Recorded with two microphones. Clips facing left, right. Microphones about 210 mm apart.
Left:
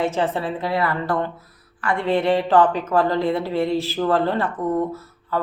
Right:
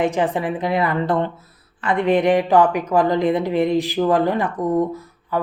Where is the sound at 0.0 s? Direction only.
15° right (ahead or behind).